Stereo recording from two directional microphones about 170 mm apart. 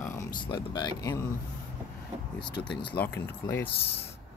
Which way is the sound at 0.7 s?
20° left (ahead or behind).